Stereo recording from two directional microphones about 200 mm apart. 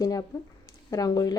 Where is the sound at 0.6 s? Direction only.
15° left (ahead or behind).